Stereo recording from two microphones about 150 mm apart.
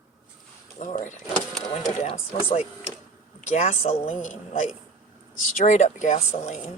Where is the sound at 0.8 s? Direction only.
55° left (ahead or behind).